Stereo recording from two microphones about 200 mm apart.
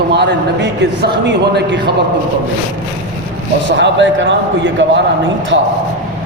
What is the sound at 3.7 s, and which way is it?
A man's voice, 65° right (ahead or behind).